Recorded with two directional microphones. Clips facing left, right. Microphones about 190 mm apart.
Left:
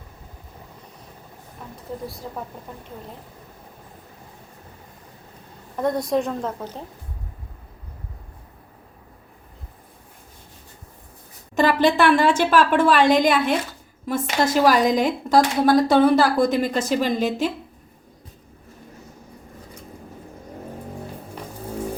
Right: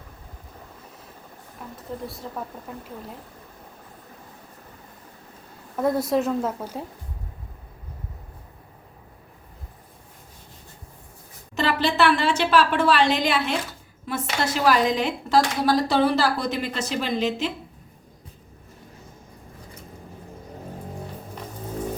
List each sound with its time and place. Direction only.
1.7 s a woman's voice: centre (ahead or behind)
5.7 s a woman's voice: 5° right (ahead or behind)
11.5 s a woman's voice: 50° left (ahead or behind)